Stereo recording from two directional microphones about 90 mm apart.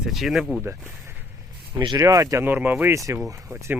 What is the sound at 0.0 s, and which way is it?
Speech, centre (ahead or behind).